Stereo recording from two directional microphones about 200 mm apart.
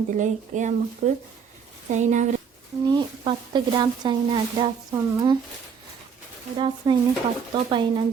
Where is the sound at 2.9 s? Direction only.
20° right (ahead or behind).